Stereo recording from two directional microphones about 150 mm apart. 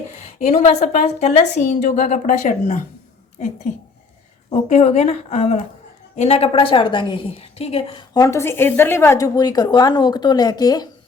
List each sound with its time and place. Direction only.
0.1 s a woman's voice: 50° left (ahead or behind)
4.5 s a woman's voice: 50° left (ahead or behind)
8.1 s a woman's voice: 20° left (ahead or behind)